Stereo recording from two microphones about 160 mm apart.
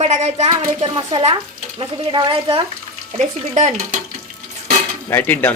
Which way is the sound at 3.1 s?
45° right (ahead or behind).